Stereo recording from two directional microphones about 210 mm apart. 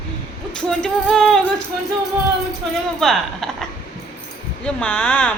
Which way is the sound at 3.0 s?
Centre (ahead or behind).